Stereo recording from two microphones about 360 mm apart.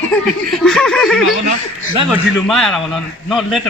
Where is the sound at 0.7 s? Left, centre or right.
Centre.